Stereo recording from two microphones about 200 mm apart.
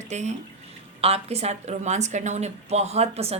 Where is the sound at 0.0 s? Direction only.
35° right (ahead or behind).